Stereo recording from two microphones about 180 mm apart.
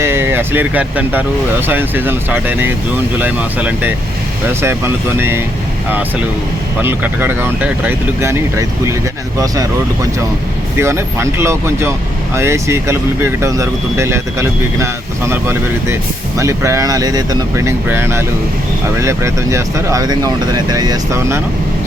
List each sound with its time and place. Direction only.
0.0 s speech: 10° right (ahead or behind)
6.8 s speech: 10° right (ahead or behind)
10.8 s speech: 15° right (ahead or behind)